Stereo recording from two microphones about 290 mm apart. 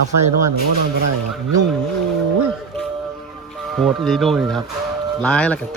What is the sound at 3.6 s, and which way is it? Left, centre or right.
A man's voice, centre.